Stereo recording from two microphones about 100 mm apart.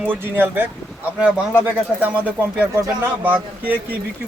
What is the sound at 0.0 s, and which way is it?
Speech, 20° right (ahead or behind).